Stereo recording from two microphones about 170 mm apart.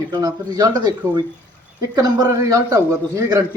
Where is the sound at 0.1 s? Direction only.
25° right (ahead or behind).